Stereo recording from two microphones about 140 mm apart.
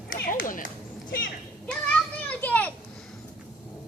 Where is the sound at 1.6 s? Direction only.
10° left (ahead or behind).